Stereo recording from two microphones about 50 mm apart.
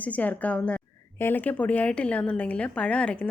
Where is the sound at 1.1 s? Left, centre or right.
Left.